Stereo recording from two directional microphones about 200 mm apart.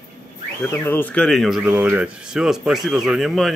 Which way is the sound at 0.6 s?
10° left (ahead or behind).